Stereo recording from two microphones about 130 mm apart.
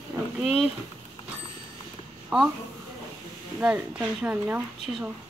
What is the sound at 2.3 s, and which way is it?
Speech, 5° right (ahead or behind).